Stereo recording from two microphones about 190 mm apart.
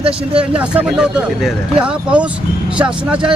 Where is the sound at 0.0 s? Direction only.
5° right (ahead or behind).